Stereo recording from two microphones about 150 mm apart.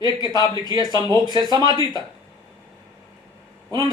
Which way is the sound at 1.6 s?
30° left (ahead or behind).